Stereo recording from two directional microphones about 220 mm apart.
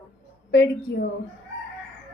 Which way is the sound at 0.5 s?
50° left (ahead or behind).